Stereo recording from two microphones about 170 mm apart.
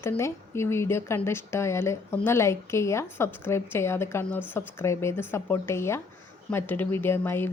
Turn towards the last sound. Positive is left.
turn(degrees=15)  # may be behind; listen again after turning